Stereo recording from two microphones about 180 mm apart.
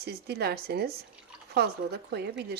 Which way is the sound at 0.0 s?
65° right (ahead or behind).